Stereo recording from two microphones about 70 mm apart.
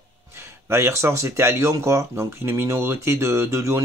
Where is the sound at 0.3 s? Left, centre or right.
Right.